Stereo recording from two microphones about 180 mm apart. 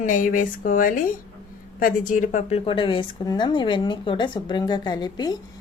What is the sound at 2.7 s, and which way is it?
Speech, 30° left (ahead or behind).